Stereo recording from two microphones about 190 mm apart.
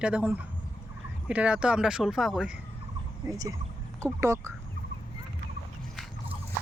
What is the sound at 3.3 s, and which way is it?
Speech, 20° right (ahead or behind).